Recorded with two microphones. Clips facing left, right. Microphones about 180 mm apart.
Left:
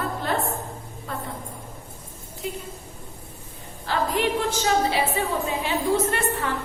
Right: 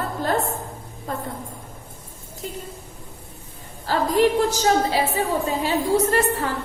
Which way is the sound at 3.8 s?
40° right (ahead or behind).